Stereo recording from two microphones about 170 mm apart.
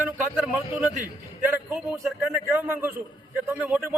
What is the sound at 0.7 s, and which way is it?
A man's voice, 10° right (ahead or behind).